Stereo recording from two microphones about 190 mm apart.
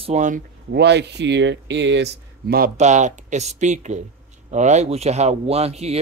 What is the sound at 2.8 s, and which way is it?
Speech, 40° right (ahead or behind).